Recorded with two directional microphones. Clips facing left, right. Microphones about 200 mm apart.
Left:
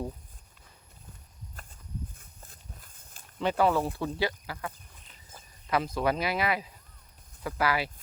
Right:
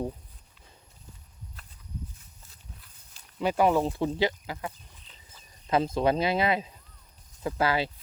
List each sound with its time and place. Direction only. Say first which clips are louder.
1.6 s walk: left 1 dB; 50° left (ahead or behind)
3.6 s speech: right 3 dB; 15° right (ahead or behind)